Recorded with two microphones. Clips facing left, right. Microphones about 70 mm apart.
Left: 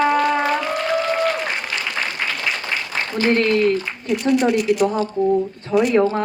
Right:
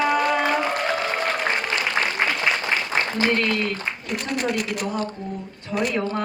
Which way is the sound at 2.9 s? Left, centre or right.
Right.